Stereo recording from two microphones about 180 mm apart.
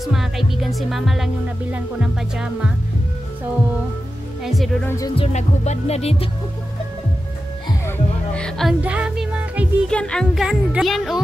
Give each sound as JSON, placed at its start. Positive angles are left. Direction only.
{"t": 0.0, "sound": "music", "side_deg": 0}
{"t": 4.4, "sound": "music", "side_deg": 0}
{"t": 4.8, "sound": "music", "side_deg": 15}
{"t": 5.1, "sound": "music", "side_deg": 35}
{"t": 8.4, "sound": "music", "side_deg": 5}
{"t": 9.8, "sound": "music", "side_deg": 5}